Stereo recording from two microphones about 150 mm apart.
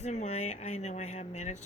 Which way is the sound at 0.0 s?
50° left (ahead or behind).